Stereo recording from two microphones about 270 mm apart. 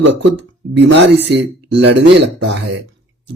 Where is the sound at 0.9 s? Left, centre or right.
Right.